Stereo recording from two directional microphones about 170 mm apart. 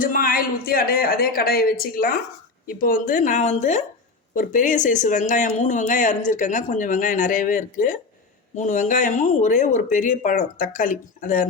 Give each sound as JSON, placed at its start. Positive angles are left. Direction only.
{"t": 0.0, "sound": "speech", "side_deg": 55}